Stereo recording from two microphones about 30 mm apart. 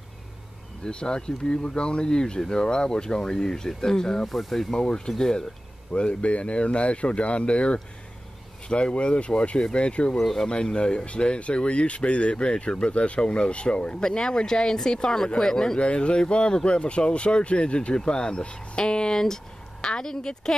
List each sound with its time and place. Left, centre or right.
0.8 s speech: left
4.3 s speech: centre
4.7 s speech: left
5.9 s speech: left
10.1 s speech: centre
10.5 s speech: left
15.8 s speech: left